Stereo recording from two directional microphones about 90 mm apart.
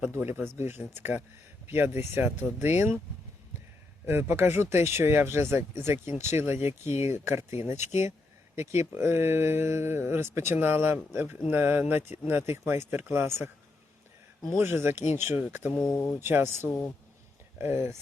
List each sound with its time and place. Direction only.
0.0 s speech: 25° right (ahead or behind)
4.0 s speech: 25° right (ahead or behind)
14.6 s speech: 25° right (ahead or behind)
15.7 s speech: 5° left (ahead or behind)
16.2 s speech: 25° right (ahead or behind)